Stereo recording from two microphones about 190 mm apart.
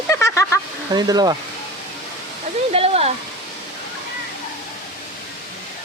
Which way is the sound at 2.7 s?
30° right (ahead or behind).